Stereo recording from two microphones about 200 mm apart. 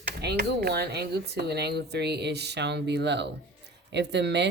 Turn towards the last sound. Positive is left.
turn(degrees=-60)  # may be behind; listen again after turning